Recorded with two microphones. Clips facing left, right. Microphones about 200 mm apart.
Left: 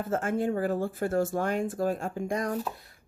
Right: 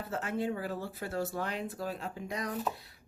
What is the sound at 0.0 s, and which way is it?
Speech, 50° left (ahead or behind).